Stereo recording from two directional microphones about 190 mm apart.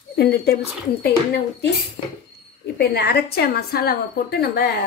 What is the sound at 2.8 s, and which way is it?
A woman's voice, 55° left (ahead or behind).